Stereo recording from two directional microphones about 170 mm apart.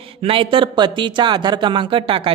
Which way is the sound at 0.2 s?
30° right (ahead or behind).